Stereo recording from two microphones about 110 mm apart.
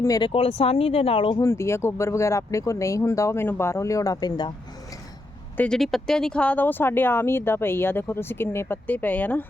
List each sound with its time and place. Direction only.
0.2 s speech: 60° left (ahead or behind)
1.4 s speech: 25° left (ahead or behind); by 4.5 s 40° left (ahead or behind)
5.5 s speech: 5° left (ahead or behind)